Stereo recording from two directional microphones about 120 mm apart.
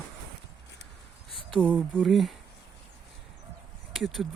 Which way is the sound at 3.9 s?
Centre (ahead or behind).